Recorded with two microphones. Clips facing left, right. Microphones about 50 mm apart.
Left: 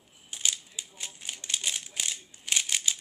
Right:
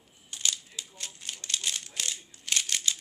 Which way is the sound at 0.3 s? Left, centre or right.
Centre.